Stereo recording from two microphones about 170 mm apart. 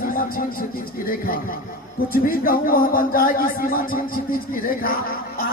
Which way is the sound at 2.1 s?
60° left (ahead or behind).